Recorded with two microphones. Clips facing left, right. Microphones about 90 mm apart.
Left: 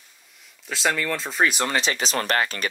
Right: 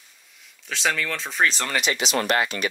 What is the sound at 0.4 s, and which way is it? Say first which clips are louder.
Speech: left 1 dB; centre (ahead or behind).